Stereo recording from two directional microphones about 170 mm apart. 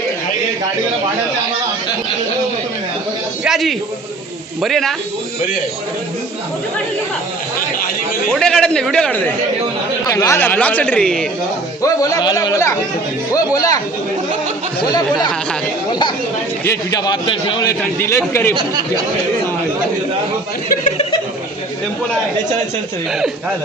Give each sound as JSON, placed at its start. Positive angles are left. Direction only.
{"t": 3.4, "sound": "a man's voice", "side_deg": 0}
{"t": 8.3, "sound": "a man's voice", "side_deg": 5}
{"t": 10.1, "sound": "a man's voice", "side_deg": 20}
{"t": 11.8, "sound": "speech", "side_deg": 20}
{"t": 15.9, "sound": "a man's voice", "side_deg": 25}